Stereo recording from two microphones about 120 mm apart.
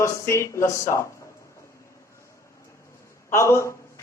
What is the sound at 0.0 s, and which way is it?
A man's voice, 25° left (ahead or behind).